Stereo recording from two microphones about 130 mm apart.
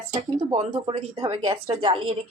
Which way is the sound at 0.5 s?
55° right (ahead or behind).